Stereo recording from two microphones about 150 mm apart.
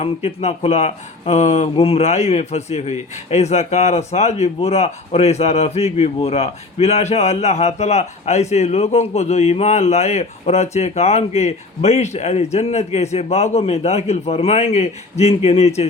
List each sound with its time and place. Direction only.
0.0 s speech: 45° left (ahead or behind)